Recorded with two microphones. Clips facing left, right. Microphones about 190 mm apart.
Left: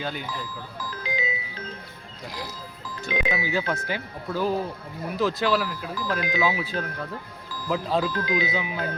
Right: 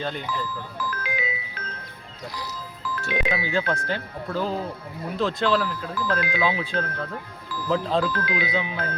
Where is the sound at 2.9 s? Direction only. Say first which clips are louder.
Right 1 dB; 20° left (ahead or behind).